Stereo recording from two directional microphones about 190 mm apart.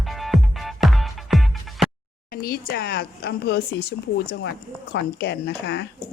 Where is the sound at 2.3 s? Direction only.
50° left (ahead or behind).